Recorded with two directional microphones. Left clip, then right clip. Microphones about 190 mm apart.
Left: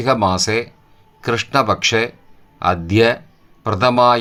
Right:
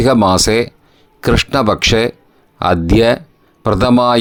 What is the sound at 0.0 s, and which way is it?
Speech, 50° right (ahead or behind).